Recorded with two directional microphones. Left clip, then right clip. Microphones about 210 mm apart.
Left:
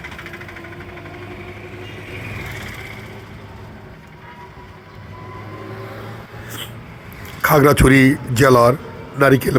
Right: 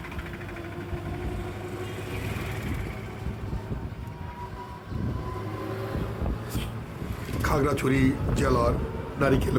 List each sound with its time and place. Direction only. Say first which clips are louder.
7.4 s a man's voice: left 13 dB; 35° left (ahead or behind)